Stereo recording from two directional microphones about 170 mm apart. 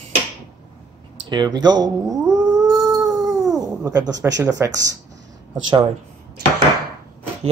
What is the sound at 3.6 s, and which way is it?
Speech, 20° right (ahead or behind).